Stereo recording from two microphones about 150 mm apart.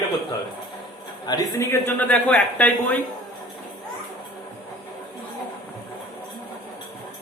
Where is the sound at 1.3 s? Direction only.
25° left (ahead or behind).